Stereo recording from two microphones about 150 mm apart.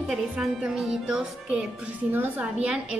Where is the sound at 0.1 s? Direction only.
Centre (ahead or behind).